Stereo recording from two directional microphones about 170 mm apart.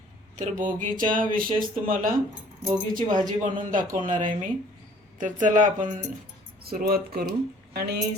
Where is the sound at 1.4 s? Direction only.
55° right (ahead or behind).